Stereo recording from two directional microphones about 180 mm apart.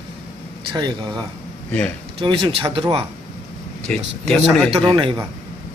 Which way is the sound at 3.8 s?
5° left (ahead or behind).